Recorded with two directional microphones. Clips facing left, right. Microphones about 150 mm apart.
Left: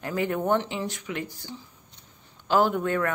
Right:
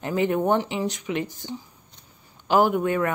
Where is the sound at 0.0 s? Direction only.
20° right (ahead or behind).